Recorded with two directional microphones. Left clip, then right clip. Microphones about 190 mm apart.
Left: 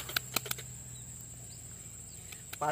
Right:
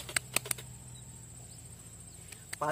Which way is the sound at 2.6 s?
20° right (ahead or behind).